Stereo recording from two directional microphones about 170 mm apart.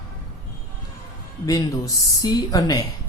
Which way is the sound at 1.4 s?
20° left (ahead or behind).